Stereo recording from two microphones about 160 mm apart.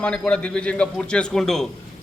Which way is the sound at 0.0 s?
5° left (ahead or behind).